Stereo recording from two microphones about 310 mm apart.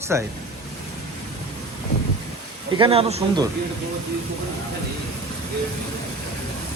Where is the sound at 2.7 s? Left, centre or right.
Centre.